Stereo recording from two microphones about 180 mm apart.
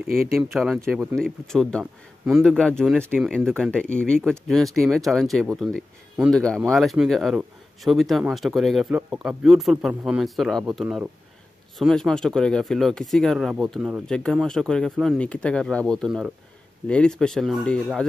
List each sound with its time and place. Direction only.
0.0 s speech: 55° right (ahead or behind)
0.4 s speech: centre (ahead or behind)
0.7 s speech: 15° right (ahead or behind)
1.1 s speech: 5° left (ahead or behind)